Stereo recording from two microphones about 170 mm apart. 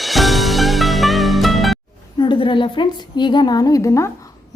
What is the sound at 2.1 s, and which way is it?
A woman's voice, 30° left (ahead or behind).